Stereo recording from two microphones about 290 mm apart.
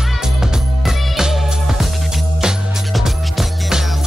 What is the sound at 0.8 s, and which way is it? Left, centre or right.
Music, centre.